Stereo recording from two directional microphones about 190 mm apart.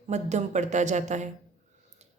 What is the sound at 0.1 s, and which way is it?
Speech, 40° right (ahead or behind).